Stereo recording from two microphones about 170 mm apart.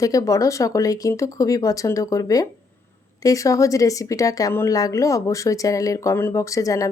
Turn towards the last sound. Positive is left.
turn(degrees=20)  # may be behind; listen again after turning